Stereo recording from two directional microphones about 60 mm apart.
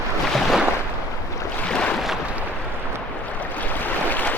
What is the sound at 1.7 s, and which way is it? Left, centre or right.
Boat, centre.